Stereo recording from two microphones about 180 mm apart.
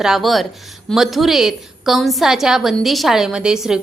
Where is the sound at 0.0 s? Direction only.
Centre (ahead or behind).